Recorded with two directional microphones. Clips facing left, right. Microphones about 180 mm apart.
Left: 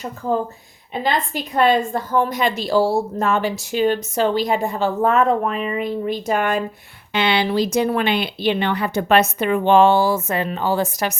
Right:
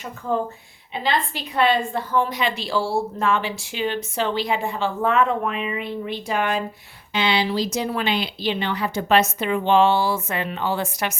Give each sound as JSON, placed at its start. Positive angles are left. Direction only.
{"t": 0.9, "sound": "a woman's voice", "side_deg": 45}
{"t": 7.1, "sound": "speech", "side_deg": 60}